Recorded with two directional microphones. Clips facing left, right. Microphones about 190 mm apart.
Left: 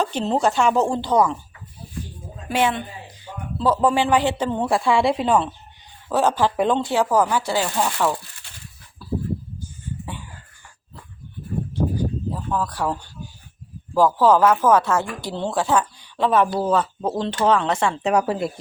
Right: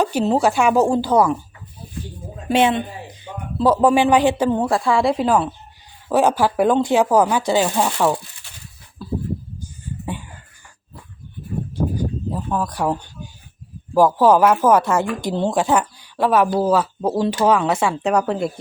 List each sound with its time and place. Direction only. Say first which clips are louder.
0.0 s speech: right 3 dB; 10° right (ahead or behind)
2.5 s a man's voice: right 5 dB; 25° right (ahead or behind); by 5.5 s centre (ahead or behind)
6.1 s speech: right 3 dB; 15° right (ahead or behind)
9.0 s a sound: right 1 dB; 20° right (ahead or behind)
12.3 s speech: right 2 dB; 15° right (ahead or behind)
18.1 s a woman's voice: right 1 dB; 5° left (ahead or behind)